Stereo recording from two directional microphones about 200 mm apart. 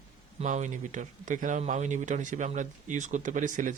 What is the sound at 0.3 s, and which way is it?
A man's voice, 35° right (ahead or behind).